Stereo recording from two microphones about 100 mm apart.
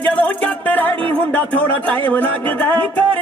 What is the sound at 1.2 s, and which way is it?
Speech, 15° left (ahead or behind).